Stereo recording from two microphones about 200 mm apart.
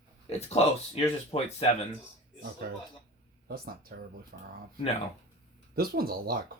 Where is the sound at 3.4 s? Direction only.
50° right (ahead or behind).